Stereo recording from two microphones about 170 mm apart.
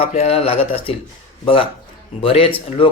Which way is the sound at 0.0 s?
40° left (ahead or behind).